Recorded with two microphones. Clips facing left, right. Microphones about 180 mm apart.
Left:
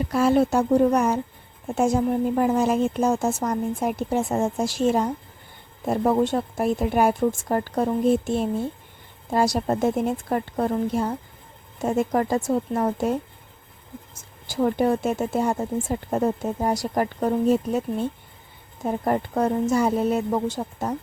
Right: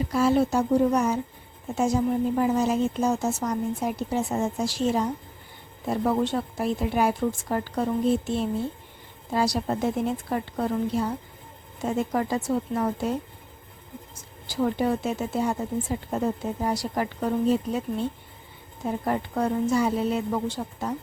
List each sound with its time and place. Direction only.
0.0 s speech: 55° left (ahead or behind)
14.5 s speech: 50° left (ahead or behind)